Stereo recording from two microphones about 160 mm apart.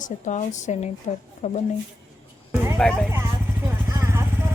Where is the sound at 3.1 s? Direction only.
15° right (ahead or behind).